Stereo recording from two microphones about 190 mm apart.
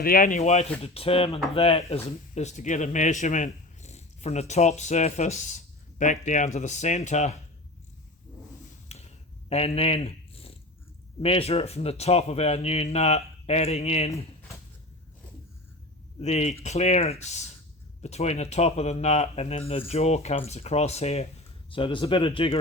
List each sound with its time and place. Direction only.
0.0 s speech: 50° left (ahead or behind)
8.9 s a sound: 35° left (ahead or behind)
11.2 s speech: 30° left (ahead or behind)
16.2 s speech: 35° left (ahead or behind)